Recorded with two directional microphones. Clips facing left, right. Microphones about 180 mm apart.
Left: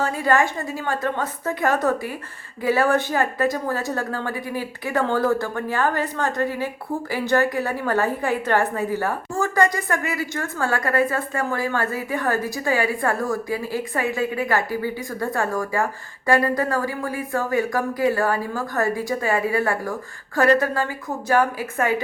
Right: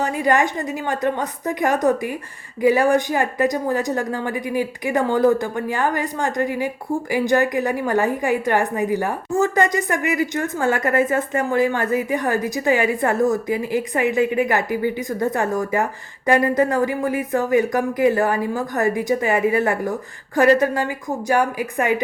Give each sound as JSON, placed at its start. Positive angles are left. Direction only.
{"t": 0.0, "sound": "a woman's voice", "side_deg": -15}